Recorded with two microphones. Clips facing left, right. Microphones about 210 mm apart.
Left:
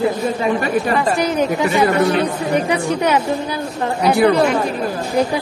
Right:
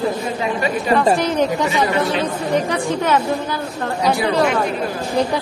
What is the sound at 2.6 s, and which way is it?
Speech, 15° left (ahead or behind).